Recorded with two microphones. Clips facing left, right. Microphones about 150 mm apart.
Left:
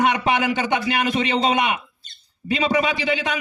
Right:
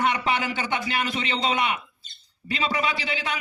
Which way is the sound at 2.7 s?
20° left (ahead or behind).